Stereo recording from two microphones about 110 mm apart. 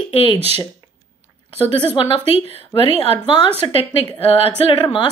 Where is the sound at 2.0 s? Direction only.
50° left (ahead or behind).